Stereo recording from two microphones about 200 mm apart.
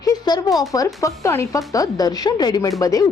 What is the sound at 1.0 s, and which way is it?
Speech, 15° left (ahead or behind).